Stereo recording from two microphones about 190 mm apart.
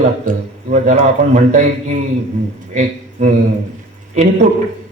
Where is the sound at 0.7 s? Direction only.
40° right (ahead or behind).